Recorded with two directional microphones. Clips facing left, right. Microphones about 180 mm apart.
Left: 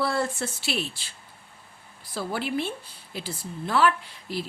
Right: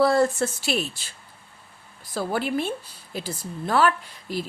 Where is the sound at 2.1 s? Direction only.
45° right (ahead or behind).